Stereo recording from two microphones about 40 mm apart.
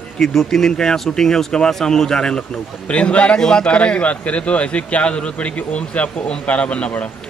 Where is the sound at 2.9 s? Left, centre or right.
Left.